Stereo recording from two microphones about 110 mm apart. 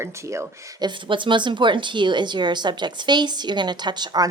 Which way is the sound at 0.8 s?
50° right (ahead or behind).